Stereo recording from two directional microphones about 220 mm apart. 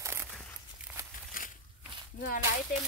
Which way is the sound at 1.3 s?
40° left (ahead or behind).